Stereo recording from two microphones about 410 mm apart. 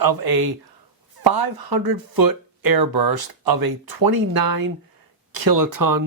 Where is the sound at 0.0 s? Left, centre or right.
Right.